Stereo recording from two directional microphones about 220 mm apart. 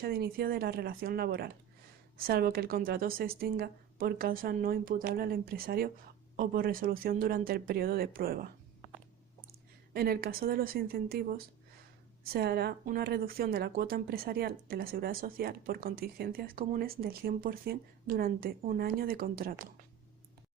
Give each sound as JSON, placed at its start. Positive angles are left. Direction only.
{"t": 0.0, "sound": "a woman's voice", "side_deg": -45}
{"t": 9.9, "sound": "a woman's voice", "side_deg": -45}